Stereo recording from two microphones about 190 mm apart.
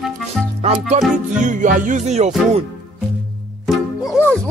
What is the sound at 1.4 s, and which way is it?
Music, 40° right (ahead or behind).